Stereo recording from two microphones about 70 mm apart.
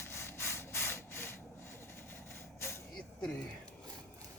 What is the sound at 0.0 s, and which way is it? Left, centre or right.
Wood, left.